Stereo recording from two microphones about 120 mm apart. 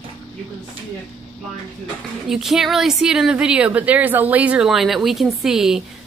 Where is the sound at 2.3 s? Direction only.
Centre (ahead or behind).